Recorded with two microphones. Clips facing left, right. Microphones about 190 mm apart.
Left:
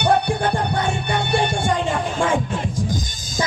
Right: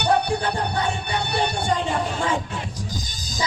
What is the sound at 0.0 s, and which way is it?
Music, 50° left (ahead or behind).